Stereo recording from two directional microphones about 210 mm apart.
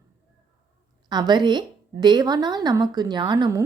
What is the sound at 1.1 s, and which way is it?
Speech, 20° right (ahead or behind).